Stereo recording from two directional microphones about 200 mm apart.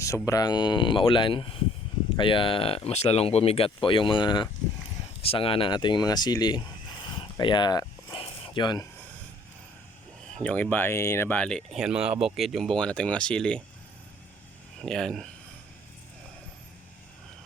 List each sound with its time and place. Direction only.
0.0 s speech: 15° left (ahead or behind)
7.1 s a sound: 25° left (ahead or behind)
10.4 s speech: 10° left (ahead or behind)
14.8 s speech: 5° left (ahead or behind)